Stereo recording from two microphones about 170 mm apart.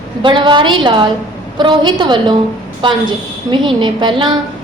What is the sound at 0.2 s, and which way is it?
A woman's voice, 25° right (ahead or behind).